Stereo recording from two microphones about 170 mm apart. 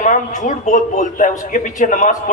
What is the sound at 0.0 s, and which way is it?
A man's voice, 50° left (ahead or behind).